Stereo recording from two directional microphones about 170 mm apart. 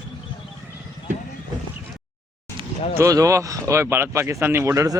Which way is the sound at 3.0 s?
20° right (ahead or behind).